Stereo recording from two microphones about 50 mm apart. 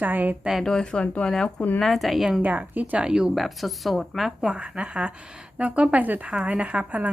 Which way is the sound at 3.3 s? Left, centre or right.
Centre.